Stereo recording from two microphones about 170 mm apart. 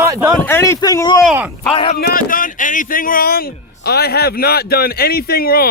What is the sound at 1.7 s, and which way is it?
Speech, 35° left (ahead or behind).